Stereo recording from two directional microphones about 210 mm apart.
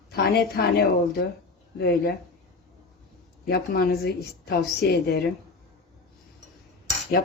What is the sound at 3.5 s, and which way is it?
A woman's voice, 50° left (ahead or behind).